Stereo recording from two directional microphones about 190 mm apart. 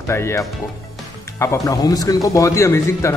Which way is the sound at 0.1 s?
15° left (ahead or behind).